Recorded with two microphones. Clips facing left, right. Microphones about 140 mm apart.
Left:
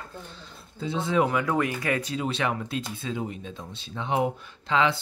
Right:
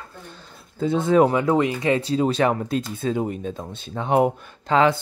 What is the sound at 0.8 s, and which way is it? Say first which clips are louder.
Speech: right 7 dB; 50° right (ahead or behind).